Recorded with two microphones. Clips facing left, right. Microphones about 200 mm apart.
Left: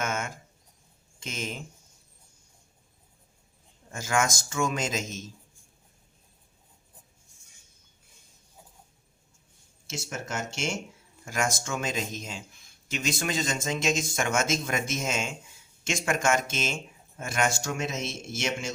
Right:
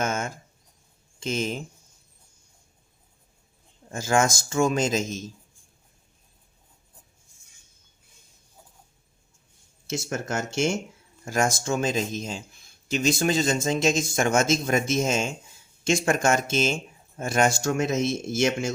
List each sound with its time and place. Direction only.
0.0 s a sound: 35° right (ahead or behind)
1.2 s speech: 30° right (ahead or behind)
3.9 s speech: 30° right (ahead or behind)
9.9 s speech: 50° right (ahead or behind)
11.3 s speech: 35° right (ahead or behind); by 18.7 s 50° right (ahead or behind)